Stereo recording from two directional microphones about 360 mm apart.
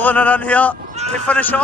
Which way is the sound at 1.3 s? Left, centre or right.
Centre.